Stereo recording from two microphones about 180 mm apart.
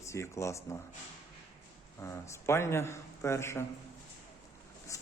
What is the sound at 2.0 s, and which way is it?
Speech, 15° left (ahead or behind).